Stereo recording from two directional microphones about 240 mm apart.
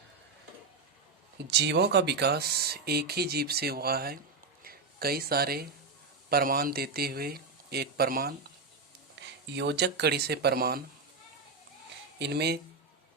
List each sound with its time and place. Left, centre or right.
1.5 s speech: right
9.6 s speech: right
12.2 s speech: right